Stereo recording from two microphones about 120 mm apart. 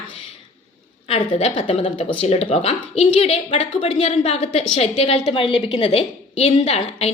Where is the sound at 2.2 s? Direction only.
60° left (ahead or behind).